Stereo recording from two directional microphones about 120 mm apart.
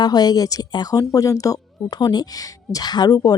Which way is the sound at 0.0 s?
35° left (ahead or behind).